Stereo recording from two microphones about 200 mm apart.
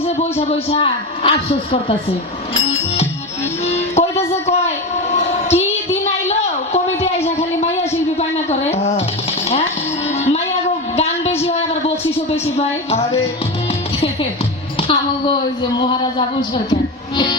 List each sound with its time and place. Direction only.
0.0 s a man's voice: 30° left (ahead or behind)
3.7 s music: 35° left (ahead or behind)
4.3 s a sound: 35° left (ahead or behind)
10.2 s music: 35° left (ahead or behind)
10.9 s a sound: 30° left (ahead or behind)
14.8 s hum: 25° left (ahead or behind)